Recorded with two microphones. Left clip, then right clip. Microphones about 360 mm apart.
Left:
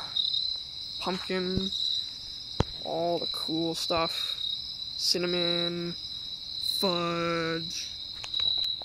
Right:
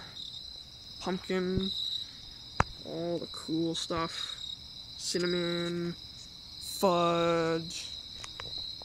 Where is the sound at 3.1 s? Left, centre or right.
Centre.